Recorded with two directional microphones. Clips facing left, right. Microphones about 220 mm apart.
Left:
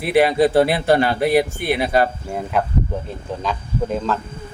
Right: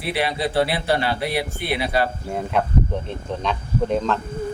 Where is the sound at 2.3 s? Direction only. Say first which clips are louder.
Even; centre (ahead or behind).